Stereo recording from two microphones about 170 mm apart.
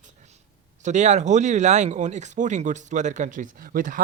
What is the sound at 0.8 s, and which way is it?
Speech, 45° right (ahead or behind).